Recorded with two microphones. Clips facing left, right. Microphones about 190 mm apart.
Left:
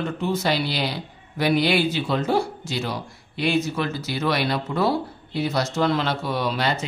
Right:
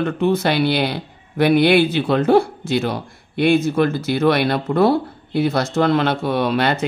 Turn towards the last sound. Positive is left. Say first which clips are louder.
# right 6 dB
turn(degrees=-60)  # may be behind; listen again after turning